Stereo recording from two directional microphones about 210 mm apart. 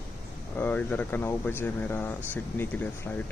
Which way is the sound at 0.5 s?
10° left (ahead or behind).